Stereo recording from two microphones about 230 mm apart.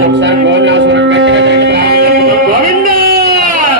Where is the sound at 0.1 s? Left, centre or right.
Right.